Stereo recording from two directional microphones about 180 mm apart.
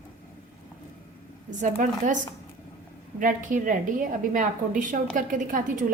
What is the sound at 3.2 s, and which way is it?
A woman's voice, 45° right (ahead or behind).